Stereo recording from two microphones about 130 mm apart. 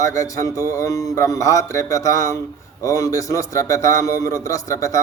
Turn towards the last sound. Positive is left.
turn(degrees=25)  # may be behind; listen again after turning